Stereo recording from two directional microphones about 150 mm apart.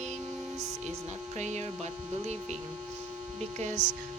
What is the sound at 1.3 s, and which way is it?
Speech, 50° right (ahead or behind).